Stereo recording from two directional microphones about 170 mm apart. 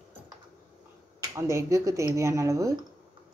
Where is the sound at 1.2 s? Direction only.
20° right (ahead or behind).